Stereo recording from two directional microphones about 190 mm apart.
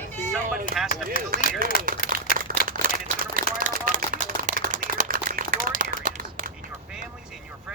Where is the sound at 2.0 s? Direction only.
50° right (ahead or behind).